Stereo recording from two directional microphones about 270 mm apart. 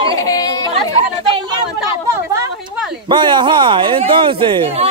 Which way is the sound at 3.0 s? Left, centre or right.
Centre.